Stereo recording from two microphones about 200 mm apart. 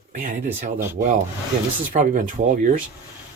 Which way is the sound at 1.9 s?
40° right (ahead or behind).